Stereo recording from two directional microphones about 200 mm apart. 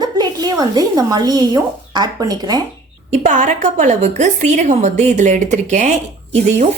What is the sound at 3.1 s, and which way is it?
A woman's voice, 40° right (ahead or behind).